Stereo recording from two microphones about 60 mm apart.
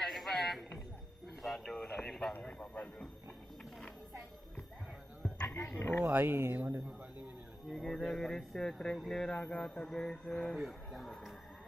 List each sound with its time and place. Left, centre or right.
0.0 s a sound: centre
1.4 s speech: centre
1.8 s speech: centre
5.8 s speech: left
6.1 s speech: right
7.7 s speech: centre
10.5 s speech: centre